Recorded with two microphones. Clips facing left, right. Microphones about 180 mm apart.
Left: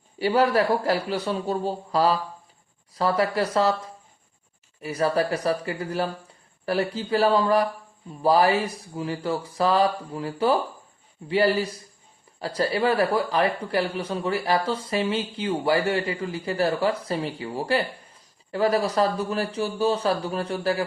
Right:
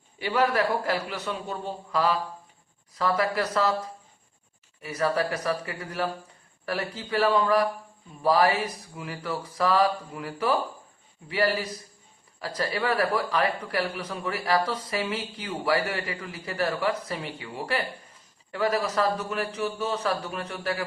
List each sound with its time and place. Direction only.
0.2 s a man's voice: 30° left (ahead or behind)
4.8 s a man's voice: 30° left (ahead or behind)